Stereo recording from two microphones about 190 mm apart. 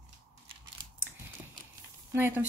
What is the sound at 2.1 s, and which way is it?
Speech, 10° right (ahead or behind).